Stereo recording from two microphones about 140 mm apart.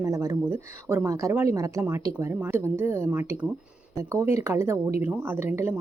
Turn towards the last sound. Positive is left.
turn(degrees=-15)  # may be behind; listen again after turning